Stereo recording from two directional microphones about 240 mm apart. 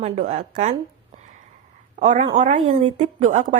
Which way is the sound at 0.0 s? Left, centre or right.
Right.